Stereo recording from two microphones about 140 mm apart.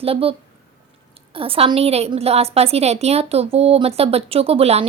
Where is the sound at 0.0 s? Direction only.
45° right (ahead or behind).